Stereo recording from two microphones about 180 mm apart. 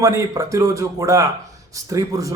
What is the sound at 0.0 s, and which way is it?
A man's voice, 15° right (ahead or behind).